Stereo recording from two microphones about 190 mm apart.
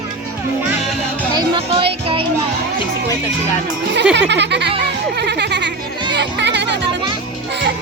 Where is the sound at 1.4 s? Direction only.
30° right (ahead or behind).